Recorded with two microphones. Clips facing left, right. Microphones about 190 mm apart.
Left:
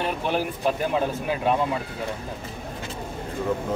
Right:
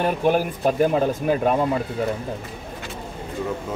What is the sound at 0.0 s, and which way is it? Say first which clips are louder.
Speech: right 5 dB; 45° right (ahead or behind).